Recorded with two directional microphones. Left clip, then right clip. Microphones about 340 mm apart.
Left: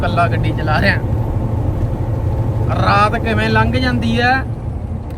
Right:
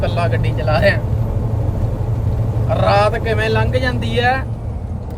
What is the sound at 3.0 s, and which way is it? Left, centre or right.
Speech, centre.